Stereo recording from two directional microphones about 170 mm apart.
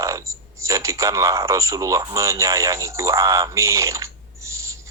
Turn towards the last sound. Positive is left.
turn(degrees=-15)  # may be behind; listen again after turning